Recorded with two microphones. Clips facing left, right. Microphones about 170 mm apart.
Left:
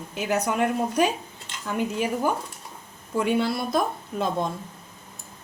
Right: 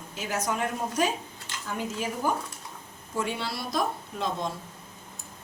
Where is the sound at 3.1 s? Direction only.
55° left (ahead or behind).